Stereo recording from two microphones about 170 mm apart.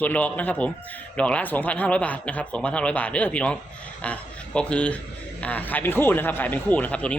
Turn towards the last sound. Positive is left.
turn(degrees=5)  # may be behind; listen again after turning